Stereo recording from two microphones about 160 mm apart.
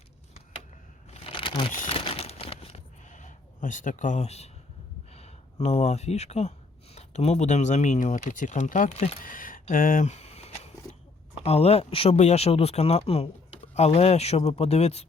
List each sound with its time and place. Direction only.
1.1 s crumpling: 35° left (ahead or behind)
5.1 s speech: 40° left (ahead or behind)
9.2 s a sound: 60° left (ahead or behind); by 10.7 s 40° left (ahead or behind)
11.4 s speech: 40° left (ahead or behind)